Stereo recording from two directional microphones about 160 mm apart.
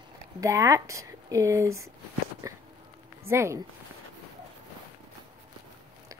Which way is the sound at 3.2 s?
15° right (ahead or behind).